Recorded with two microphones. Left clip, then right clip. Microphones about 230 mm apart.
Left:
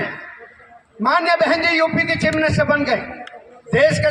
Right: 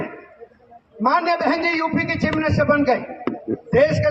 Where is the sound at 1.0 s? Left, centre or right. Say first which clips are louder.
Left 2 dB; left.